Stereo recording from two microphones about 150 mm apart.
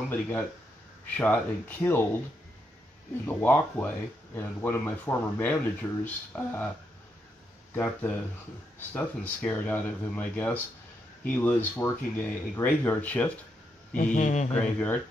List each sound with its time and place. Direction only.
0.1 s speech: 10° left (ahead or behind)
3.3 s speech: 10° left (ahead or behind)
7.7 s speech: 10° left (ahead or behind)
14.1 s a man's voice: 50° left (ahead or behind)
14.5 s speech: 10° left (ahead or behind)